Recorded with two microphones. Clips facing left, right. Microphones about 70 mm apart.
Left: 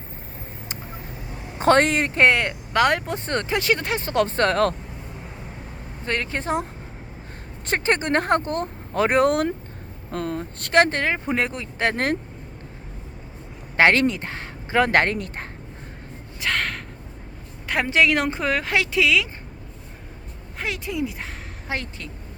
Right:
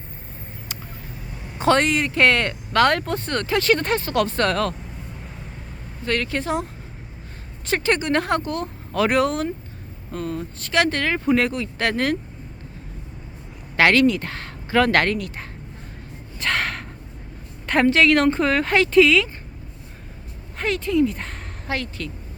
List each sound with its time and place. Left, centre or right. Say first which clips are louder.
1.5 s speech: left 1 dB; left
2.1 s speech: left 1 dB; left
4.0 s speech: even; left
6.1 s speech: right 2 dB; left
7.7 s speech: right 1 dB; left
10.1 s speech: even; left
10.9 s speech: right 3 dB; left
13.7 s speech: right 1 dB; left
16.4 s gasp: right 1 dB; centre
17.7 s a woman's voice: right 7 dB; centre
17.9 s speech: left 1 dB; centre
20.6 s speech: right 7 dB; centre
21.7 s speech: right 3 dB; left